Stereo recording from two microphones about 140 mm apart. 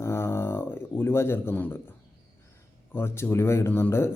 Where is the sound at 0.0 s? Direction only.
20° left (ahead or behind).